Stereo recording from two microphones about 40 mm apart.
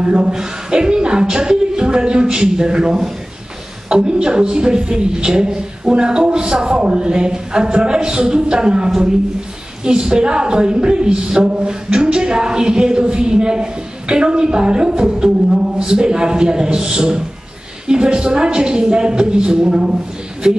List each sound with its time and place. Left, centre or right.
0.0 s speech: right